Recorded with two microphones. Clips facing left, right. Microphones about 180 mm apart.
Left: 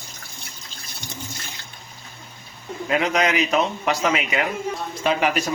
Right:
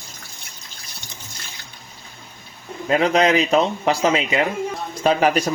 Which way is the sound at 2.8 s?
30° right (ahead or behind).